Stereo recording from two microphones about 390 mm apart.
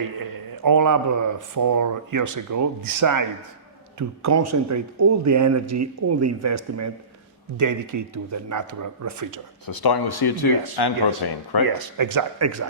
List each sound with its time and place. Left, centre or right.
0.6 s a man's voice: right
9.6 s speech: left
11.8 s a man's voice: right